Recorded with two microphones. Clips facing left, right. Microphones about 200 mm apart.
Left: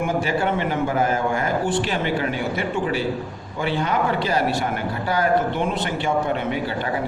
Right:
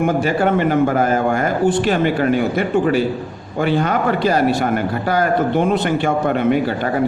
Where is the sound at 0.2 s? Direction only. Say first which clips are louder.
Right 6 dB; 50° right (ahead or behind).